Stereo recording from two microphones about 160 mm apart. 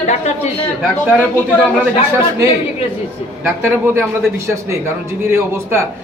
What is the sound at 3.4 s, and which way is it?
Speech, 15° right (ahead or behind).